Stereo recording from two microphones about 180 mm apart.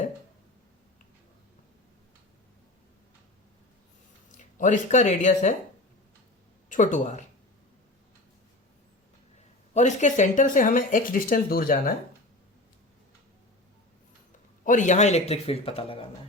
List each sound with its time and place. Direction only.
4.3 s speech: 45° left (ahead or behind)
6.7 s speech: 45° left (ahead or behind)
9.7 s speech: 40° left (ahead or behind)
14.6 s a man's voice: 45° left (ahead or behind)